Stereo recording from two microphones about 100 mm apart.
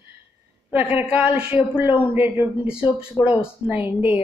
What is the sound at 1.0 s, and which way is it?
A woman's voice, 10° right (ahead or behind).